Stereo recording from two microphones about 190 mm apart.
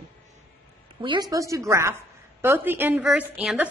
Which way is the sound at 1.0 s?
20° right (ahead or behind).